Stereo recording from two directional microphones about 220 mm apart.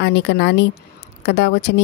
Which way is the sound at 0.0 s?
50° left (ahead or behind).